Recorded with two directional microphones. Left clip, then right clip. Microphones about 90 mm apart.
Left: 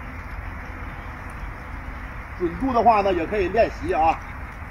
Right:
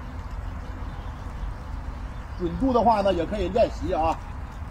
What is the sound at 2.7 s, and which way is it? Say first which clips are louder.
Speech: left 3 dB; 50° right (ahead or behind).